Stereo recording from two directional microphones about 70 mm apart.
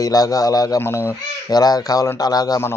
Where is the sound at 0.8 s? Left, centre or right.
Left.